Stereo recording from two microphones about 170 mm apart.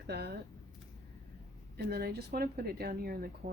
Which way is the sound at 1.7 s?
65° right (ahead or behind).